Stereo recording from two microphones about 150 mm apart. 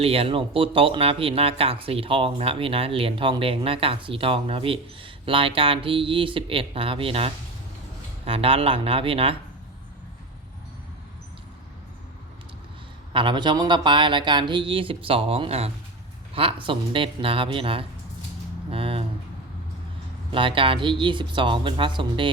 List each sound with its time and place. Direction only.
0.0 s speech: 40° right (ahead or behind)
13.1 s speech: 30° right (ahead or behind)
18.7 s a sound: 40° right (ahead or behind)
20.3 s speech: 35° right (ahead or behind)